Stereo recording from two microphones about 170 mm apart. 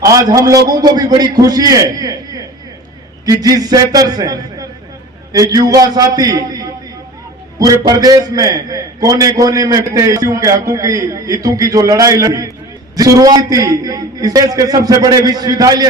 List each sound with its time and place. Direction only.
0.0 s a man's voice: 20° right (ahead or behind)